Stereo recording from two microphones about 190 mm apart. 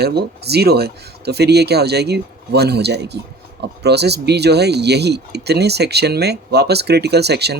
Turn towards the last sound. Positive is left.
turn(degrees=-60)  # may be behind; listen again after turning